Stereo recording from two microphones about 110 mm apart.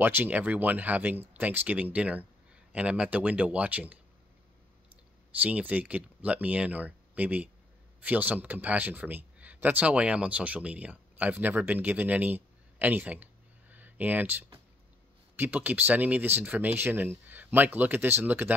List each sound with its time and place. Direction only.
0.0 s speech: 15° right (ahead or behind)
5.4 s speech: 15° right (ahead or behind)
15.3 s speech: 15° right (ahead or behind)